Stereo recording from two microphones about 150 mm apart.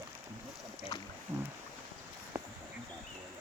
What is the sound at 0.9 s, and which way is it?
Boat, 25° left (ahead or behind).